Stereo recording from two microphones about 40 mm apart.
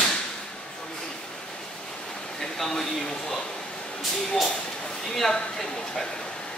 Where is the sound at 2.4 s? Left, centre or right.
Centre.